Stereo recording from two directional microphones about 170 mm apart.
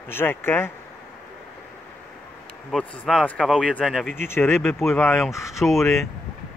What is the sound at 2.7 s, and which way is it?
Speech, 5° left (ahead or behind).